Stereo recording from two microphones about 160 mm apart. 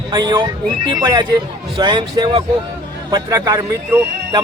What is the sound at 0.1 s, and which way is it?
A man's voice, 25° right (ahead or behind).